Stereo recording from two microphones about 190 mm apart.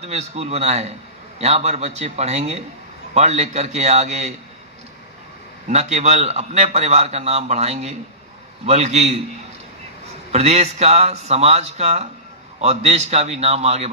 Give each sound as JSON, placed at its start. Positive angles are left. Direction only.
{"t": 0.0, "sound": "a man's voice", "side_deg": -35}
{"t": 5.7, "sound": "a man's voice", "side_deg": -35}